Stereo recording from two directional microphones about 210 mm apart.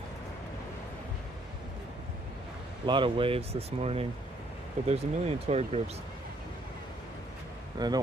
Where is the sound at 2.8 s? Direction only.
25° right (ahead or behind).